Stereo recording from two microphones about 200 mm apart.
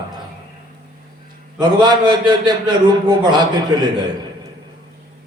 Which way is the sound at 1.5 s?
20° right (ahead or behind).